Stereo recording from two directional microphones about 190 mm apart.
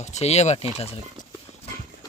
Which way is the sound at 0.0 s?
35° left (ahead or behind).